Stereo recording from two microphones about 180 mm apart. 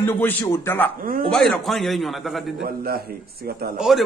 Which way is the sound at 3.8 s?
Centre (ahead or behind).